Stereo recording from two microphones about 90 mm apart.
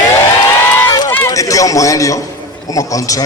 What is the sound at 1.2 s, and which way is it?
A man's voice, 40° left (ahead or behind).